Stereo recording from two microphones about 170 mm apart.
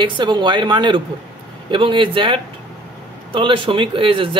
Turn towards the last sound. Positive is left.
turn(degrees=-30)  # may be behind; listen again after turning